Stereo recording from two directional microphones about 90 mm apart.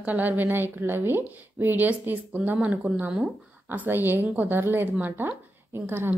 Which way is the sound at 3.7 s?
25° right (ahead or behind).